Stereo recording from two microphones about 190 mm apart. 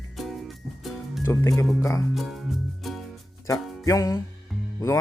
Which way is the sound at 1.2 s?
15° left (ahead or behind).